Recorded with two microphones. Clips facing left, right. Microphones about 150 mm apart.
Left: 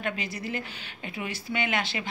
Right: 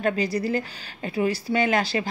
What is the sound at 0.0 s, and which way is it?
A woman's voice, 35° right (ahead or behind).